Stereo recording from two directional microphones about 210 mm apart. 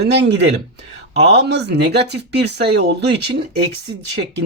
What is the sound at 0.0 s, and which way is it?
Speech, 55° right (ahead or behind).